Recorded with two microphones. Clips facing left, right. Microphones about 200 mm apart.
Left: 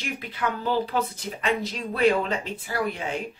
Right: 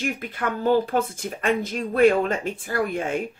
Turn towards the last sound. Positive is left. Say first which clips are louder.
# right 4 dB
turn(degrees=-50)  # may be behind; listen again after turning